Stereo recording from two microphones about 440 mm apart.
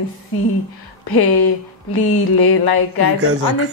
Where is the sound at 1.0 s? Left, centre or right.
Left.